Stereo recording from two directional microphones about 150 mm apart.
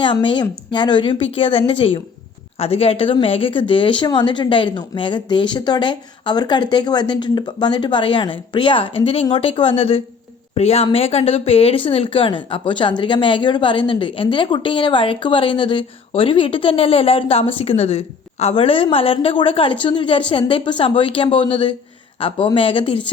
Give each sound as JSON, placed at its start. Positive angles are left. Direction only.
{"t": 0.0, "sound": "speech", "side_deg": 35}